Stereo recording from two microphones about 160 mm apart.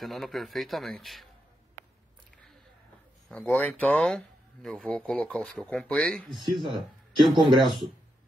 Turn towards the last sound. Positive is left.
turn(degrees=-30)  # may be behind; listen again after turning